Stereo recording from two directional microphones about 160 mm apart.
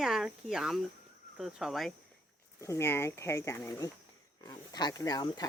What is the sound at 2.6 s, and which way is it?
Speech, 20° left (ahead or behind).